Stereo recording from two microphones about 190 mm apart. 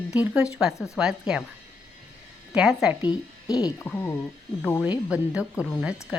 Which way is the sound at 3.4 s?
20° left (ahead or behind).